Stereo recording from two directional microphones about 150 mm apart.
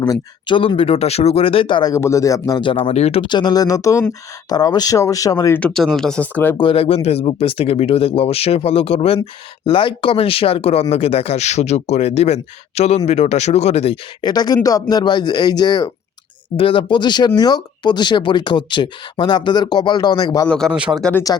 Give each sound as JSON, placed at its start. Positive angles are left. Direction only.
{"t": 0.0, "sound": "speech", "side_deg": 30}
{"t": 5.5, "sound": "speech", "side_deg": 5}
{"t": 6.6, "sound": "speech", "side_deg": 40}
{"t": 14.2, "sound": "speech", "side_deg": 30}
{"t": 20.5, "sound": "speech", "side_deg": 5}
{"t": 20.7, "sound": "speech", "side_deg": -5}
{"t": 21.0, "sound": "speech", "side_deg": 10}